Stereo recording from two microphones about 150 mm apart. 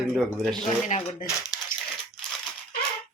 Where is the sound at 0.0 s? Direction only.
5° right (ahead or behind).